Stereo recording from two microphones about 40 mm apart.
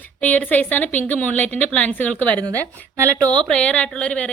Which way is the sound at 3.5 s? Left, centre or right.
Left.